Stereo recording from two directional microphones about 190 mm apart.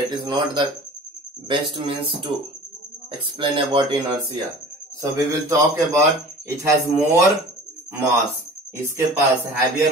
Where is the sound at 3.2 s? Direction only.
25° right (ahead or behind).